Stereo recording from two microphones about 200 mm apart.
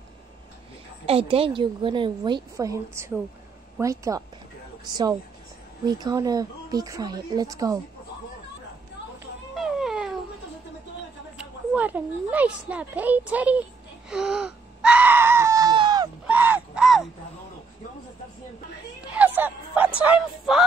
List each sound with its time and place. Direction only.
1.0 s a woman's voice: 30° right (ahead or behind)
5.9 s a woman's voice: 20° right (ahead or behind)
9.6 s cat: centre (ahead or behind)
11.3 s a woman's voice: 10° right (ahead or behind)
16.3 s a sound: 10° right (ahead or behind)
19.1 s music: 10° right (ahead or behind)